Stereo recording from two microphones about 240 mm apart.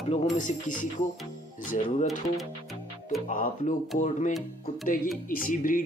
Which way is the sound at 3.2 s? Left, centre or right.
Left.